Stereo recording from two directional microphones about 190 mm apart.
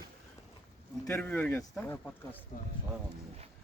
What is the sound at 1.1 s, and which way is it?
Speech, 10° left (ahead or behind).